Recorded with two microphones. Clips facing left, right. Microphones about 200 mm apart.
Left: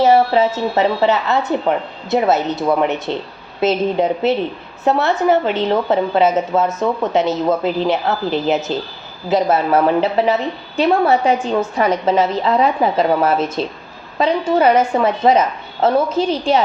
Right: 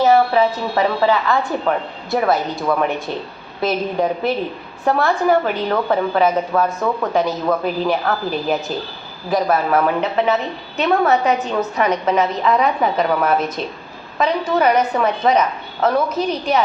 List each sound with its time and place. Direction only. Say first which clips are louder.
0.0 s a woman's voice: left 1 dB; 30° left (ahead or behind)